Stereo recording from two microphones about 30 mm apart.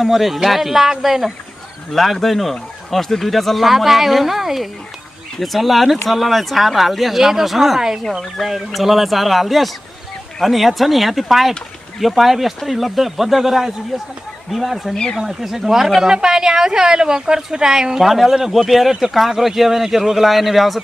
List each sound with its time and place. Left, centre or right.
0.0 s speech: centre
1.9 s a woman's voice: centre
18.0 s speech: centre